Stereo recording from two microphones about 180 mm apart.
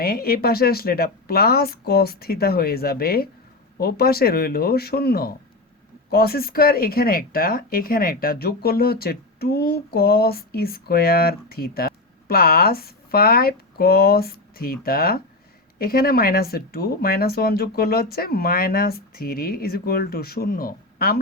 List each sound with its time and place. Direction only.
0.0 s speech: 55° left (ahead or behind)